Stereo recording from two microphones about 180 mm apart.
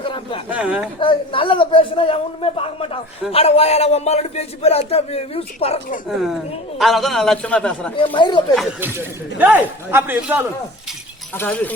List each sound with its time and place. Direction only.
0.0 s a sound: 30° left (ahead or behind)
0.5 s a man's voice: 5° right (ahead or behind)
0.9 s a woman's voice: 30° left (ahead or behind)
6.1 s a man's voice: centre (ahead or behind)
7.9 s a woman's voice: 30° left (ahead or behind)
8.8 s a man's voice: 10° right (ahead or behind)
11.3 s speech: 10° left (ahead or behind)